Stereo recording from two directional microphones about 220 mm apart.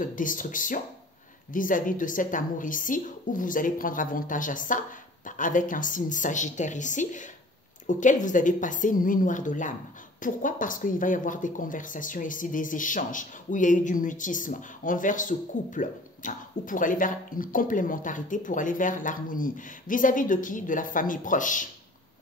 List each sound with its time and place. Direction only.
0.0 s speech: 35° left (ahead or behind)